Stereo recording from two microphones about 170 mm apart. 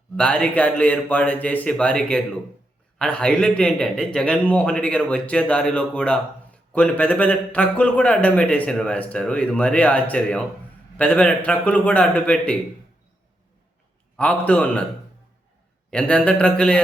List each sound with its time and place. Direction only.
0.2 s a man's voice: 5° left (ahead or behind)
14.2 s a man's voice: 5° left (ahead or behind)
15.9 s a man's voice: 5° left (ahead or behind)